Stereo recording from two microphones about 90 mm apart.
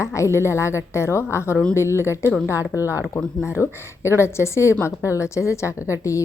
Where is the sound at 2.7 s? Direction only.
35° left (ahead or behind).